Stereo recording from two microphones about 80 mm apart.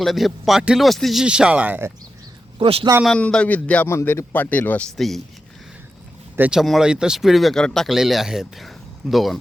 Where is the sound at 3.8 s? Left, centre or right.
Left.